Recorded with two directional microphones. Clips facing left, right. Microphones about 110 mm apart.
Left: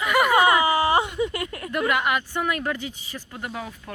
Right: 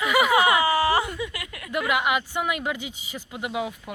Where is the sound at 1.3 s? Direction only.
35° left (ahead or behind).